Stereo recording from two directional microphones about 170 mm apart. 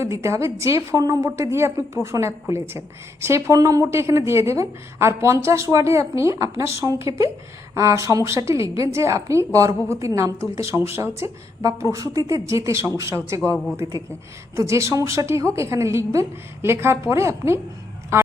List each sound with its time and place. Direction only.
0.0 s a woman's voice: 15° right (ahead or behind)
14.5 s a woman's voice: 15° right (ahead or behind)